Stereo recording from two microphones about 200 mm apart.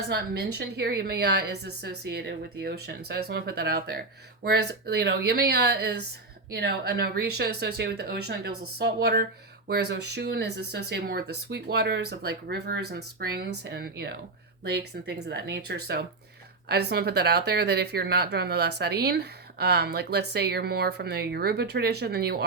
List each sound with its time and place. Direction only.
0.1 s speech: 55° right (ahead or behind)